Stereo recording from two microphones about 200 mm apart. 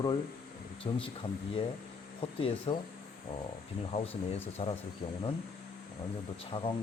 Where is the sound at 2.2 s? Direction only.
30° left (ahead or behind).